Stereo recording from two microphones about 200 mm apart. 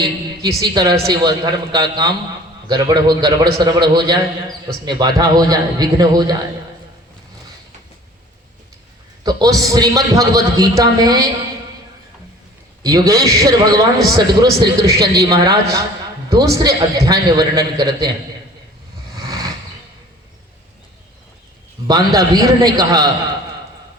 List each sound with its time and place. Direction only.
0.6 s a man's voice: 20° right (ahead or behind)
9.2 s a man's voice: 20° right (ahead or behind)
12.8 s a man's voice: 15° right (ahead or behind)
19.1 s vehicle: 20° right (ahead or behind)
21.8 s a man's voice: 20° right (ahead or behind)